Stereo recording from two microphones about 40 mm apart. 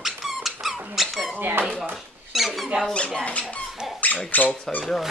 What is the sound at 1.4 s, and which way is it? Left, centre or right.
Speech, right.